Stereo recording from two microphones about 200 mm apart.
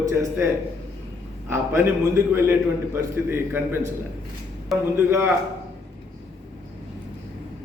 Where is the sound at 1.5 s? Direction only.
10° right (ahead or behind).